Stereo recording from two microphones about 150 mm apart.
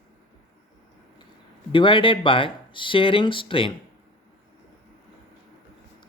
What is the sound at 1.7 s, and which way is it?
Speech, 35° left (ahead or behind).